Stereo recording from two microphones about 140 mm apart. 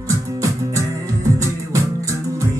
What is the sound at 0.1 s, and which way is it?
Music, 20° right (ahead or behind).